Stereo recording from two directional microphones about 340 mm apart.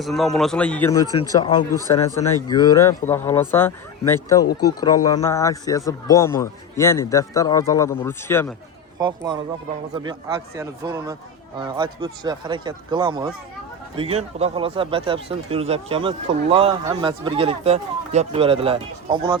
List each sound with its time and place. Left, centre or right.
0.0 s a man's voice: centre
9.0 s speech: centre